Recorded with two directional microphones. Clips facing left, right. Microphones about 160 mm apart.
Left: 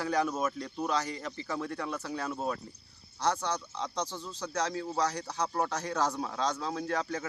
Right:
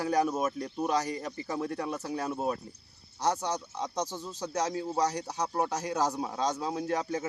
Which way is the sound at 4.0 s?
45° right (ahead or behind).